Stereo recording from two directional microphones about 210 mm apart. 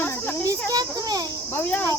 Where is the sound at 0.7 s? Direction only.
20° right (ahead or behind).